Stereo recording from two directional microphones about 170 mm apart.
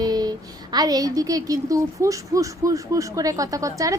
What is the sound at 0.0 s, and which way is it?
A woman's voice, 25° right (ahead or behind).